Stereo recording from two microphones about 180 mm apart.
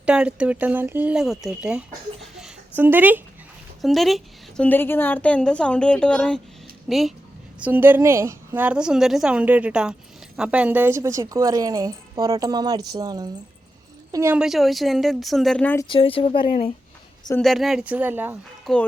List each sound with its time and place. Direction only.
0.0 s a woman's voice: 5° right (ahead or behind)
2.2 s a sound: 5° right (ahead or behind)
3.8 s a woman's voice: centre (ahead or behind)
7.6 s a woman's voice: 10° right (ahead or behind)
14.3 s a woman's voice: centre (ahead or behind)
15.9 s speech: 30° left (ahead or behind)
17.4 s a woman's voice: centre (ahead or behind)
18.6 s speech: 5° left (ahead or behind)